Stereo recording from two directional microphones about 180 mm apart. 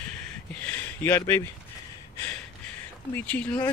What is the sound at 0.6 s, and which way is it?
Speech, 10° left (ahead or behind).